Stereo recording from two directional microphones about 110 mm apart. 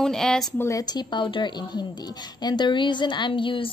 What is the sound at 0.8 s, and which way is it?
Speech, 40° left (ahead or behind).